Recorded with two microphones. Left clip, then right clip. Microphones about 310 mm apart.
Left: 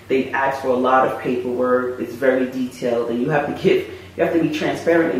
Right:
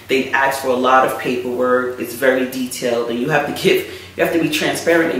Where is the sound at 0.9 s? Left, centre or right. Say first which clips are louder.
Right 4 dB; centre.